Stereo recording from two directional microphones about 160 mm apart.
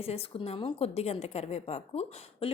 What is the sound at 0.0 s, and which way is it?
A woman's voice, 40° left (ahead or behind).